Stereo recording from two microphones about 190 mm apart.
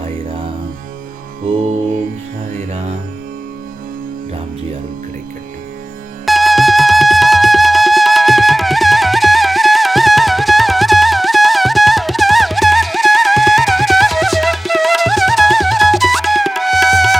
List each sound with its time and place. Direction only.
2.6 s music: 35° right (ahead or behind)
6.2 s music: centre (ahead or behind)